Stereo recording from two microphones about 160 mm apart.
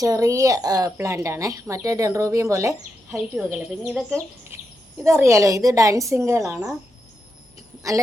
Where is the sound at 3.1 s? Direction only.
5° right (ahead or behind).